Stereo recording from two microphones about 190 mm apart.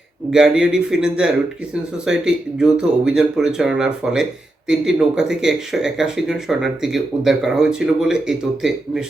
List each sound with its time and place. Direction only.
0.3 s speech: 5° right (ahead or behind)